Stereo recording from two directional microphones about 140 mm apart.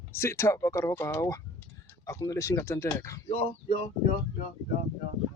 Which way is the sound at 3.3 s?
40° left (ahead or behind).